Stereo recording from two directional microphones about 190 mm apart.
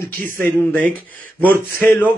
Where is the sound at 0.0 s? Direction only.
15° left (ahead or behind).